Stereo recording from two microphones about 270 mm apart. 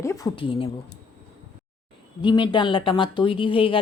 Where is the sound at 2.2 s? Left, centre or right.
Centre.